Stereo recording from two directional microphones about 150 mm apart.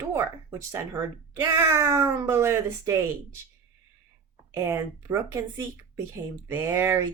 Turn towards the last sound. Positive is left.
turn(degrees=-15)  # may be behind; listen again after turning